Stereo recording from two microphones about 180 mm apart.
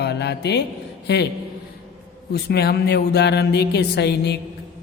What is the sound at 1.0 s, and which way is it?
Speech, 70° left (ahead or behind).